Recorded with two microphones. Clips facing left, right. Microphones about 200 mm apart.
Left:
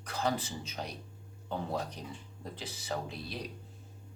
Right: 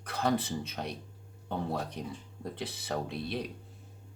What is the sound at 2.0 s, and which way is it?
Speech, 65° right (ahead or behind).